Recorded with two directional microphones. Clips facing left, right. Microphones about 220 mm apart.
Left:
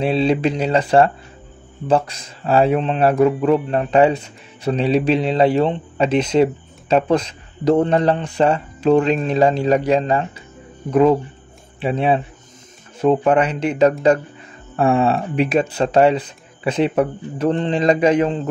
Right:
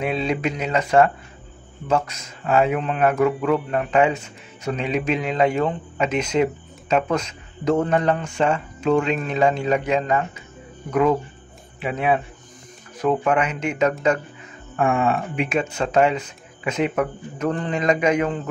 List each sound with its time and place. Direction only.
0.0 s speech: 30° left (ahead or behind)